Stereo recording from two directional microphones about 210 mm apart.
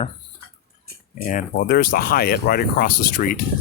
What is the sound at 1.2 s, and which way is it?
Speech, 40° left (ahead or behind).